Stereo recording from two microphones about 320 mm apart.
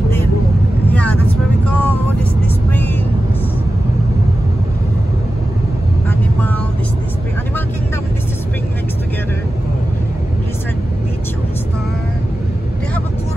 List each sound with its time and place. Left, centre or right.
0.9 s vehicle: centre